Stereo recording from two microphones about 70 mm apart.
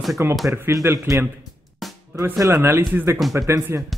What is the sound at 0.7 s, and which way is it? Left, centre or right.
Speech, right.